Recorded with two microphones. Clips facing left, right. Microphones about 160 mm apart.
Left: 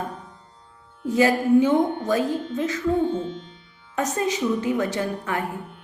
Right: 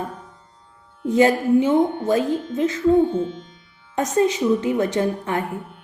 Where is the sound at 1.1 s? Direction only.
30° right (ahead or behind).